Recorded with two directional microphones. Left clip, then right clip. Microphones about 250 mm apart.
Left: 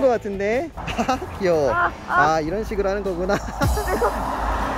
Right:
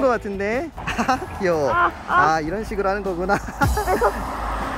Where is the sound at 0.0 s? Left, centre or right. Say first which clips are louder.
Left 1 dB; centre.